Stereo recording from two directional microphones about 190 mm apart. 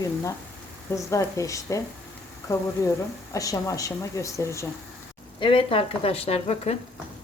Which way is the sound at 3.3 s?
15° left (ahead or behind).